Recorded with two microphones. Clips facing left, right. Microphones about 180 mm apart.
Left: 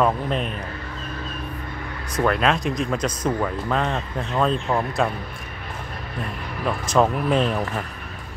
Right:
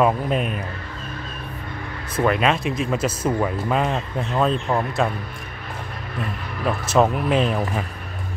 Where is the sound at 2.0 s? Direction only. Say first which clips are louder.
Right 1 dB; centre (ahead or behind).